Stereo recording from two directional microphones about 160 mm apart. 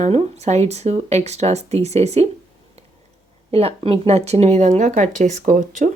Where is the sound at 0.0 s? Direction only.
40° right (ahead or behind).